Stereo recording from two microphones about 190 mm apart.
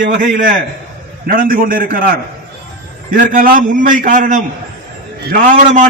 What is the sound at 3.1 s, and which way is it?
A man's voice, 45° right (ahead or behind).